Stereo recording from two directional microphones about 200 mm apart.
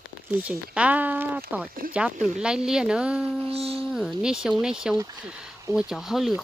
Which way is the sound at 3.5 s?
30° right (ahead or behind).